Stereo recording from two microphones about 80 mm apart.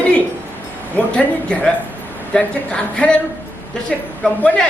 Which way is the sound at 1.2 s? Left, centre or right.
Centre.